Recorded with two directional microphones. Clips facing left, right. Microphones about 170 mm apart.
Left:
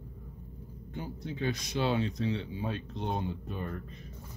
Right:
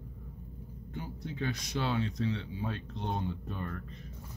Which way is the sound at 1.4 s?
20° left (ahead or behind).